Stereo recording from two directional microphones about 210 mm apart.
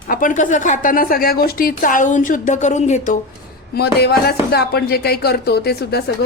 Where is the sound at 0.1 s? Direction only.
40° left (ahead or behind).